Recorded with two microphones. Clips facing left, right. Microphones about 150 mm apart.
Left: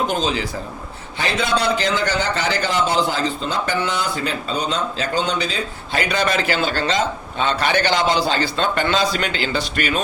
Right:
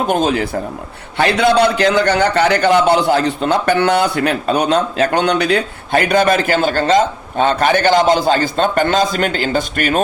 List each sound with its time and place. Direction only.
0.1 s a man's voice: 55° right (ahead or behind)